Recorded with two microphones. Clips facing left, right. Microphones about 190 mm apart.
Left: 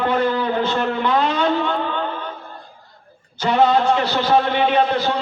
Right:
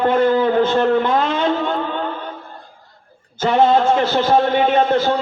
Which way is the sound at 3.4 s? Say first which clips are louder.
Right 2 dB; 45° right (ahead or behind).